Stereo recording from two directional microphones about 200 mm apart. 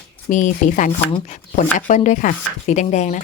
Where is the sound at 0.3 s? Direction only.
40° left (ahead or behind).